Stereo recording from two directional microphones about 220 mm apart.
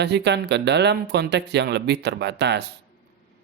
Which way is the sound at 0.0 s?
50° right (ahead or behind).